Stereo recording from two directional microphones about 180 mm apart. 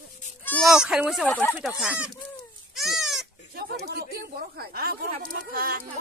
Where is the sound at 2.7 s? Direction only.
Centre (ahead or behind).